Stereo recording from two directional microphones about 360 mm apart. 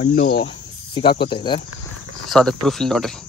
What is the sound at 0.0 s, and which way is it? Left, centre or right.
Speech, left.